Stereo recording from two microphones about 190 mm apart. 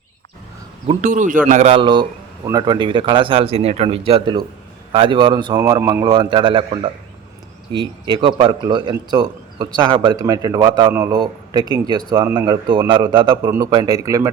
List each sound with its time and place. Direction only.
0.9 s a man's voice: 40° right (ahead or behind); by 14.3 s 15° right (ahead or behind)